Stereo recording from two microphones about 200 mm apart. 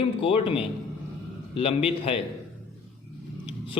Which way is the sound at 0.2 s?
25° left (ahead or behind).